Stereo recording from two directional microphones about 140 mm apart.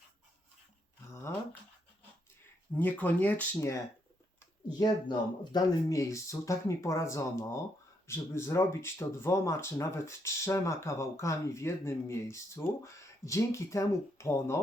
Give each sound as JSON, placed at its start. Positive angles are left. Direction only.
{"t": 2.7, "sound": "speech", "side_deg": 10}
{"t": 4.7, "sound": "speech", "side_deg": 30}